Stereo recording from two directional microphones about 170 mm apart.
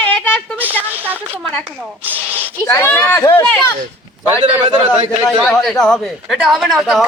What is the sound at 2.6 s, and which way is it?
Speech, 15° left (ahead or behind).